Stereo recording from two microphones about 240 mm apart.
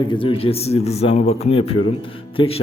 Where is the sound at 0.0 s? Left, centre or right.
Left.